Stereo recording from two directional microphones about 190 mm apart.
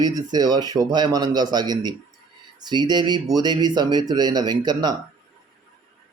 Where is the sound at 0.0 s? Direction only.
20° right (ahead or behind).